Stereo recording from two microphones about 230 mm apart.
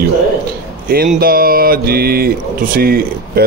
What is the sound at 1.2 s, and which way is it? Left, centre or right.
A man's voice, right.